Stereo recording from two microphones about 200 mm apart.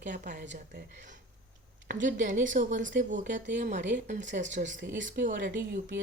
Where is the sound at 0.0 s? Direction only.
40° right (ahead or behind).